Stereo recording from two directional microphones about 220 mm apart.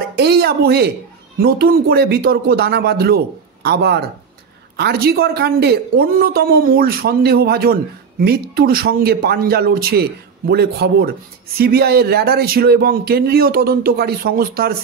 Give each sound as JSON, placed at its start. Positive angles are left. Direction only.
{"t": 0.2, "sound": "a woman's voice", "side_deg": -45}